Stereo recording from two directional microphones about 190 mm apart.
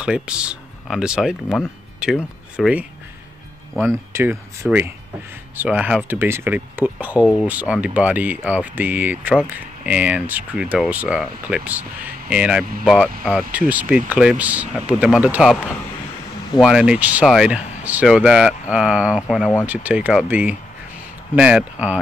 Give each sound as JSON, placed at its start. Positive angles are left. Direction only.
{"t": 0.0, "sound": "speech", "side_deg": -5}
{"t": 4.1, "sound": "speech", "side_deg": -10}